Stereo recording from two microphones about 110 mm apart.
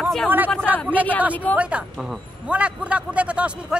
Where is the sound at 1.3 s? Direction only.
15° left (ahead or behind).